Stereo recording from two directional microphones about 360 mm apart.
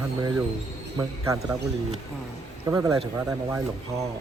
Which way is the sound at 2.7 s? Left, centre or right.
Centre.